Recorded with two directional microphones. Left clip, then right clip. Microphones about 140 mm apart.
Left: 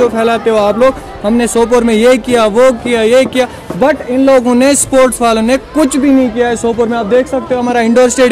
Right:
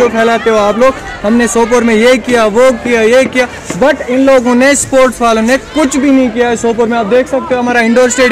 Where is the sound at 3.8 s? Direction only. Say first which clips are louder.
Right 1 dB; 20° left (ahead or behind).